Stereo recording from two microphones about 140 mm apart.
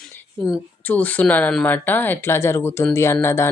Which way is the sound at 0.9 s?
10° left (ahead or behind).